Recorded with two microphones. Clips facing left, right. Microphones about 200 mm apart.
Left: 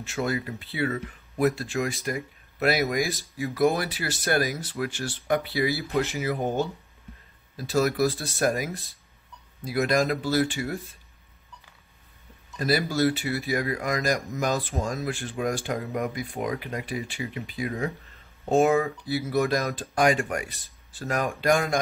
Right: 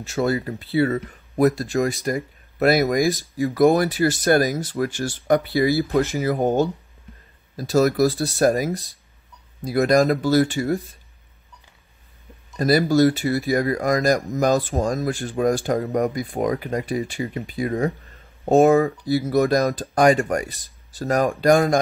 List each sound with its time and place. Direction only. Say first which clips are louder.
0.0 s speech: right 6 dB; 35° right (ahead or behind)
12.5 s speech: right 8 dB; 40° right (ahead or behind)